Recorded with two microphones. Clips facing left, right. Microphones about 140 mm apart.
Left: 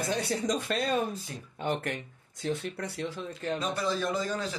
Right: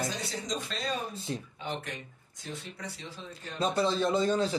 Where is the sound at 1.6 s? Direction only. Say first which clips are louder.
Left 6 dB; 55° left (ahead or behind).